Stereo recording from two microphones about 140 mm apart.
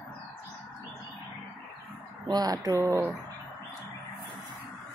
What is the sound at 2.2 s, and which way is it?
Speech, 30° right (ahead or behind).